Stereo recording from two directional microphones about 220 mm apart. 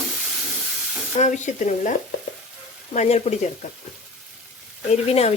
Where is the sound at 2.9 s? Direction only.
30° left (ahead or behind).